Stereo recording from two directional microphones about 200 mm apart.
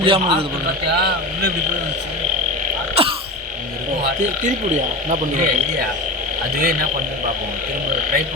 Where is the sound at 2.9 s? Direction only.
30° right (ahead or behind).